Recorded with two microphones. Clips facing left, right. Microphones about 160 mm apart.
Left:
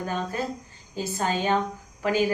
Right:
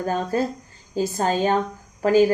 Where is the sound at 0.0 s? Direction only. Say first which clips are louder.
Right 6 dB; 40° right (ahead or behind).